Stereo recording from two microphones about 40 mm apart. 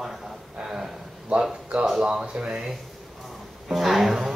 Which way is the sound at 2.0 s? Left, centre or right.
Centre.